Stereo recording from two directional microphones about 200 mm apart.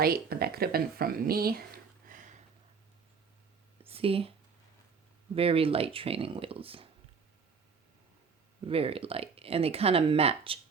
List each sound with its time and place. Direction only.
0.0 s speech: 50° right (ahead or behind)
2.0 s a sound: 40° right (ahead or behind)
3.8 s speech: 30° right (ahead or behind)
8.6 s speech: 30° right (ahead or behind)